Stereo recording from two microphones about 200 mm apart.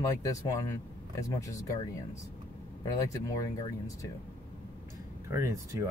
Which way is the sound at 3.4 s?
15° left (ahead or behind).